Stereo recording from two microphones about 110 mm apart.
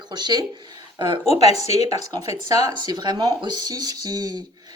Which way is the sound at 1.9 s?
35° right (ahead or behind).